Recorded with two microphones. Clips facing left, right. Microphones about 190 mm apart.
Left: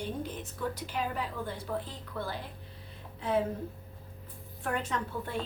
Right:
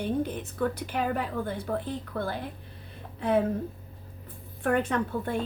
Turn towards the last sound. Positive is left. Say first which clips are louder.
# right 6 dB
turn(degrees=-55)  # may be behind; listen again after turning